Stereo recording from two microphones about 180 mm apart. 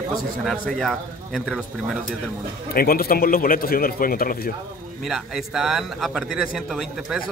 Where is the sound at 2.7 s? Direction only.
55° left (ahead or behind).